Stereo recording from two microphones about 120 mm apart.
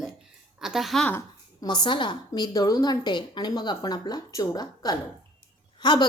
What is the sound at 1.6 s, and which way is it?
A woman's voice, 35° left (ahead or behind).